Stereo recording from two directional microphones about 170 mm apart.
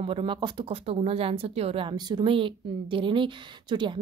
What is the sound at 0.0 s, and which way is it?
Speech, 30° right (ahead or behind).